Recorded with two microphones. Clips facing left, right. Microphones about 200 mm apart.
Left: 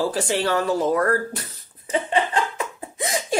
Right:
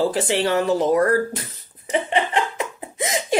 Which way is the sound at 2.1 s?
20° right (ahead or behind).